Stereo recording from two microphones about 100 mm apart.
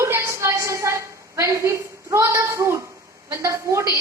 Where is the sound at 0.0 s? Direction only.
30° right (ahead or behind).